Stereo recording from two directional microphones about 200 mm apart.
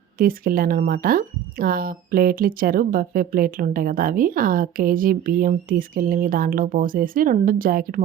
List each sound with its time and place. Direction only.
0.2 s speech: 45° right (ahead or behind)